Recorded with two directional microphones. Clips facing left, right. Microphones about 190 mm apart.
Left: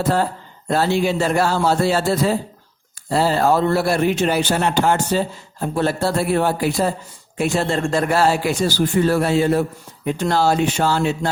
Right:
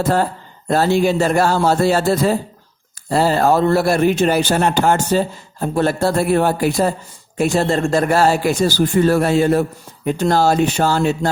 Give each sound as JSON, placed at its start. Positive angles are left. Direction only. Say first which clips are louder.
{"t": 0.7, "sound": "a man's voice", "louder": "right 3 dB", "side_deg": -45}